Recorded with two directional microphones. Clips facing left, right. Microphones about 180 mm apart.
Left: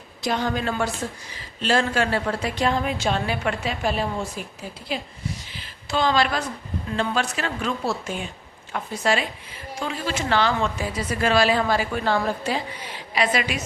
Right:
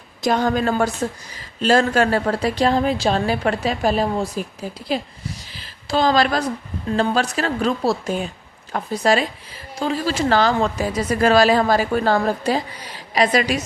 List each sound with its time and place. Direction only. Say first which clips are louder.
0.2 s a woman's voice: right 6 dB; 45° right (ahead or behind)
5.5 s a sound: right 5 dB; 35° right (ahead or behind)
6.9 s a woman's voice: right 5 dB; 40° right (ahead or behind)